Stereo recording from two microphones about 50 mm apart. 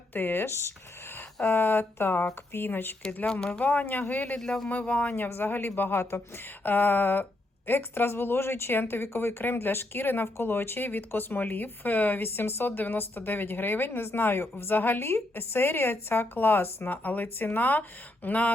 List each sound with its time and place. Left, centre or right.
0.1 s speech: left
1.5 s speech: left
3.6 s speech: left
4.4 s speech: centre
4.7 s speech: left
5.3 s speech: left